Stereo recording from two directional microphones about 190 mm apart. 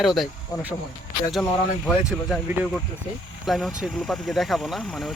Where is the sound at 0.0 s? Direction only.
Centre (ahead or behind).